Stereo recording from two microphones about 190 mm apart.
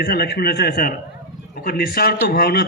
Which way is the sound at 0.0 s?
55° left (ahead or behind).